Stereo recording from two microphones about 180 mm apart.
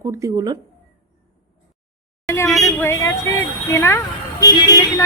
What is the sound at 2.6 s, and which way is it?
Speech, 15° left (ahead or behind).